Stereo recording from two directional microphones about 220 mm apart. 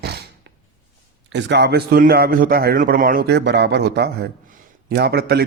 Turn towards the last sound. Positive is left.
turn(degrees=-45)  # may be behind; listen again after turning